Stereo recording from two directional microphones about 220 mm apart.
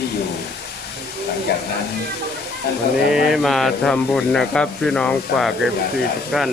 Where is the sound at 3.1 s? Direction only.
Centre (ahead or behind).